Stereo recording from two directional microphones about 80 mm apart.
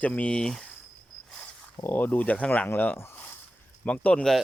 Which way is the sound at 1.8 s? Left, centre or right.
Left.